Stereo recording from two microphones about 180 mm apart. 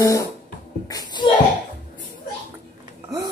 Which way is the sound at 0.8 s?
20° left (ahead or behind).